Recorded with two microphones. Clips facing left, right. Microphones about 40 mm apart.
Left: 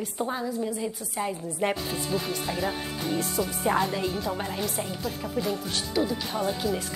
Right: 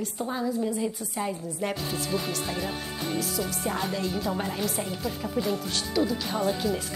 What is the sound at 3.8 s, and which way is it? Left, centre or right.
Speech, centre.